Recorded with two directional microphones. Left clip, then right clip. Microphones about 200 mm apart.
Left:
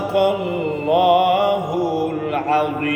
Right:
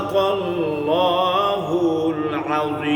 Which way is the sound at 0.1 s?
15° right (ahead or behind).